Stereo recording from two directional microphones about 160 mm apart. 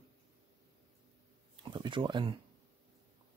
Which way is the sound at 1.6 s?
30° right (ahead or behind).